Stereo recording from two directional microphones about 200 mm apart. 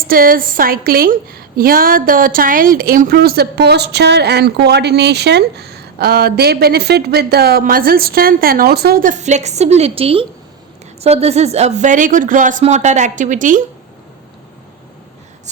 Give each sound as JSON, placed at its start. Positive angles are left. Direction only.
{"t": 0.1, "sound": "a woman's voice", "side_deg": -45}